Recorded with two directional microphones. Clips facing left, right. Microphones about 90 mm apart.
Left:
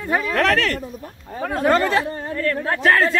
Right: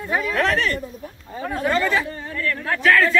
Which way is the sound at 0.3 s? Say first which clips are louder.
Left 2 dB; 65° left (ahead or behind).